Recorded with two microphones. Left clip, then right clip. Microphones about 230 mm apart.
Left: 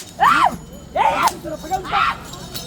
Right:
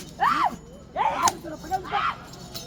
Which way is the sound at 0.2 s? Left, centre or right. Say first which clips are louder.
Left 8 dB; centre.